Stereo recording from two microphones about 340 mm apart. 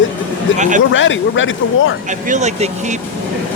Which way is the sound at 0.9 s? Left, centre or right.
Left.